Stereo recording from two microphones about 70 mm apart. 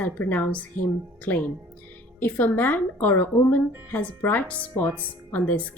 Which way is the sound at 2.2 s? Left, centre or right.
Left.